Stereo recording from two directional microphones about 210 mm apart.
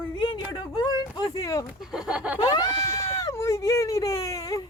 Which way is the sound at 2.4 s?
20° left (ahead or behind).